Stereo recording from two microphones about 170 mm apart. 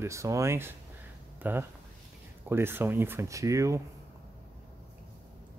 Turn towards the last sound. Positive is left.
turn(degrees=-20)  # may be behind; listen again after turning